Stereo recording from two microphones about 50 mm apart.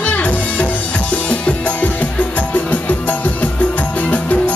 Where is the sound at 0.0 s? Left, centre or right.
Left.